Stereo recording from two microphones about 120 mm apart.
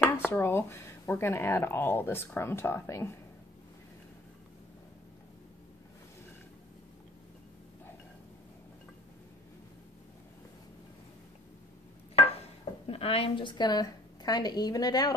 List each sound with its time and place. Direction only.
0.0 s speech: 20° left (ahead or behind)
12.8 s a woman's voice: 55° left (ahead or behind); by 15.1 s 35° left (ahead or behind)